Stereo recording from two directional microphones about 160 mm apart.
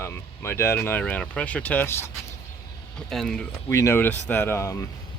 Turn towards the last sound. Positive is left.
turn(degrees=15)  # may be behind; listen again after turning